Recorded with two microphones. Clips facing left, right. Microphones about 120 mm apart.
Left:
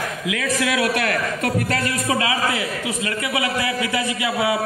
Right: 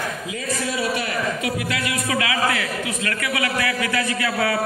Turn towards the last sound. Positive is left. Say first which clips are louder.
# left 1 dB
turn(degrees=20)  # may be behind; listen again after turning